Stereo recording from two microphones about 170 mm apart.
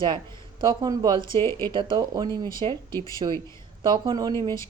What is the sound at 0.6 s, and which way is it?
Speech, 25° right (ahead or behind).